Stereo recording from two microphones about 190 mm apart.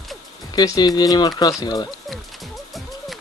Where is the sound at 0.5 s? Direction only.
20° left (ahead or behind).